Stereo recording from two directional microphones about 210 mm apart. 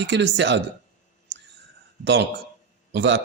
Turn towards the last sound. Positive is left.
turn(degrees=-55)  # may be behind; listen again after turning